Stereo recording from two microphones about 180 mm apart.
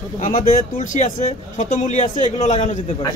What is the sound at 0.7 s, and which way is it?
A man's voice, 45° left (ahead or behind).